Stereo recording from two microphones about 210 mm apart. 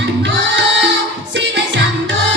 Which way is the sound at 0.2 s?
60° right (ahead or behind).